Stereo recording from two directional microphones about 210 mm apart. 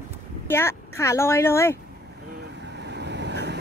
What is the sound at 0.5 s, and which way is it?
Speech, 10° left (ahead or behind).